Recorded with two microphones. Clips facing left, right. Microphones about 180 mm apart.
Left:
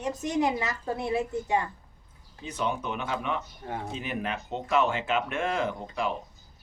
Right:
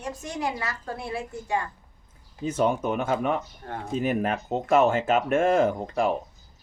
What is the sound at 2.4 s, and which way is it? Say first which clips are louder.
Speech: right 7 dB; 45° right (ahead or behind).